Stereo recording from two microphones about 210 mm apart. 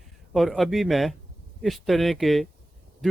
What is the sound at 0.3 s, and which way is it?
Speech, centre (ahead or behind).